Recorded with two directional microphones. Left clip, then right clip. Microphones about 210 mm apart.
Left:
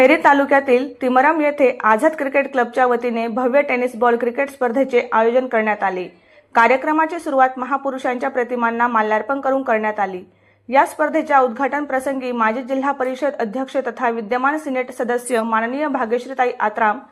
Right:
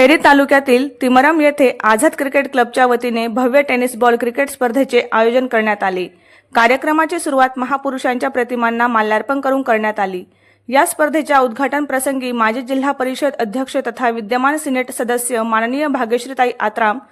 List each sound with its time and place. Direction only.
0.0 s a woman's voice: 45° right (ahead or behind)